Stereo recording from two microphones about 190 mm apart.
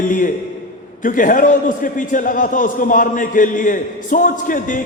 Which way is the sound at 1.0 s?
45° left (ahead or behind).